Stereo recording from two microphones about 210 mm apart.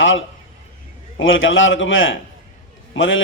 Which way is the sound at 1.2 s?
65° left (ahead or behind).